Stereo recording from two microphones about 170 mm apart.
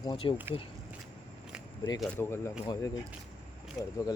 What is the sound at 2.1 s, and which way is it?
Speech, 15° left (ahead or behind).